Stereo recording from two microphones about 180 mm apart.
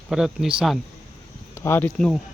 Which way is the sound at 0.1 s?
5° right (ahead or behind).